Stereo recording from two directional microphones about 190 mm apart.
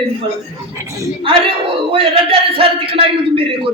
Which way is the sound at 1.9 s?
30° right (ahead or behind).